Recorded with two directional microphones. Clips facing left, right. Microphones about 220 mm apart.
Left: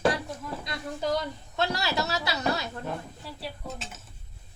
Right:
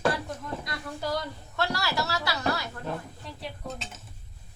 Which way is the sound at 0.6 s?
20° left (ahead or behind).